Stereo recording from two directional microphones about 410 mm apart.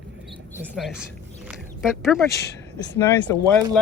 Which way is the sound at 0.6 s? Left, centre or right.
Centre.